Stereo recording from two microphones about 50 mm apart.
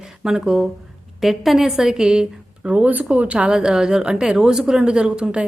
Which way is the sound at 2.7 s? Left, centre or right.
Right.